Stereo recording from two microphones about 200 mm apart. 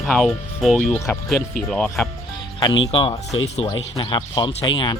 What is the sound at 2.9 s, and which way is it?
Speech, 25° left (ahead or behind).